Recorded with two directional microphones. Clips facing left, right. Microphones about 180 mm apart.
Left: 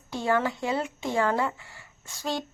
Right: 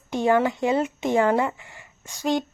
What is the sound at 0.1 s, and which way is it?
Speech, 20° right (ahead or behind).